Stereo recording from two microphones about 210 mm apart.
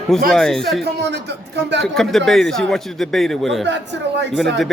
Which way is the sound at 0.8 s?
55° right (ahead or behind).